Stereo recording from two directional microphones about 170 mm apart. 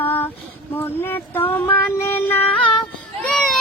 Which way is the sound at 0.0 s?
10° left (ahead or behind).